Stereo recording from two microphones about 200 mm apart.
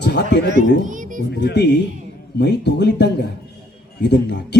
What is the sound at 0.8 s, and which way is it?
Music, 40° right (ahead or behind).